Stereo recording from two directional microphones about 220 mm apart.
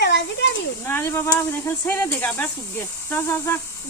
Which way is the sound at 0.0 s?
50° left (ahead or behind).